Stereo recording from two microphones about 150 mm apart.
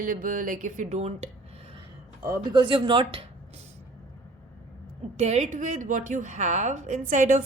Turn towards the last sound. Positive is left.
turn(degrees=-55)  # may be behind; listen again after turning